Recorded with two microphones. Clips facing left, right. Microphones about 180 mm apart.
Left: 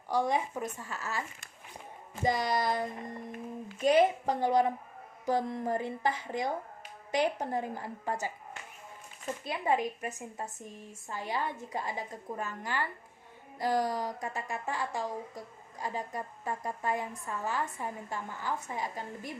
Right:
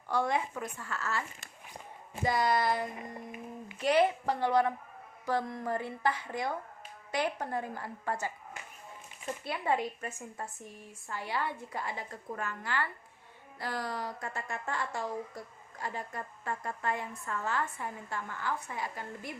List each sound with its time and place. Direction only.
0.1 s a woman's voice: 15° left (ahead or behind)
9.4 s a woman's voice: 20° left (ahead or behind)